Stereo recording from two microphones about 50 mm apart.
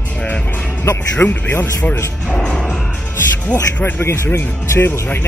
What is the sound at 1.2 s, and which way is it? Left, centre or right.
Speech, left.